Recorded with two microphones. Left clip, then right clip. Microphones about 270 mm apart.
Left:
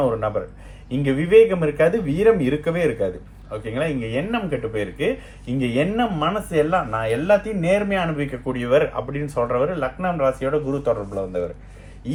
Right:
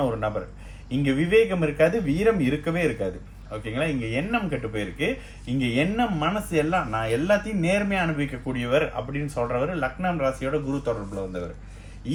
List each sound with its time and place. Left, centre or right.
0.0 s speech: centre
4.1 s speech: centre